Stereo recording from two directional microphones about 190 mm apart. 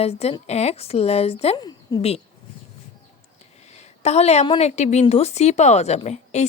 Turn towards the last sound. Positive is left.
turn(degrees=35)  # may be behind; listen again after turning